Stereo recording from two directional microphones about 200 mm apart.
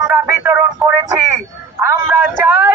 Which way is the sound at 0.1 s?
10° right (ahead or behind).